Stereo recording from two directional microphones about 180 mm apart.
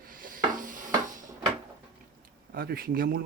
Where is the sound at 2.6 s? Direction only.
55° right (ahead or behind).